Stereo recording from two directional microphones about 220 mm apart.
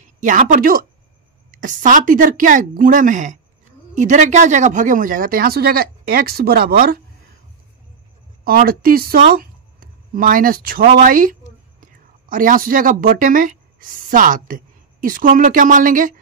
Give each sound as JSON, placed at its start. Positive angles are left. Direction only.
{"t": 0.0, "sound": "speech", "side_deg": -35}
{"t": 8.5, "sound": "speech", "side_deg": -40}